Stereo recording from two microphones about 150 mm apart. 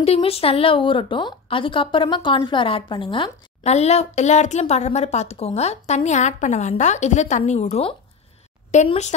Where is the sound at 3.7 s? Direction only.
45° left (ahead or behind).